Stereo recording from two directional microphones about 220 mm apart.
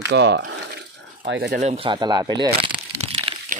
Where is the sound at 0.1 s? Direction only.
50° right (ahead or behind).